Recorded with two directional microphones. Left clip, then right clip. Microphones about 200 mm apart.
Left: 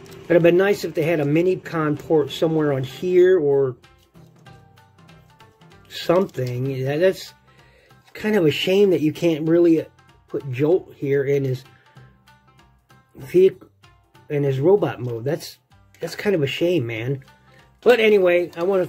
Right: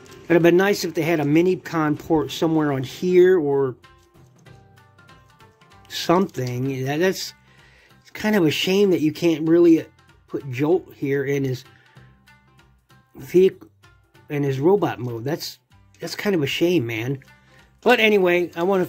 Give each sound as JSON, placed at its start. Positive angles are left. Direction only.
{"t": 0.3, "sound": "speech", "side_deg": -35}
{"t": 5.0, "sound": "music", "side_deg": 0}
{"t": 5.8, "sound": "speech", "side_deg": -35}
{"t": 13.2, "sound": "speech", "side_deg": -25}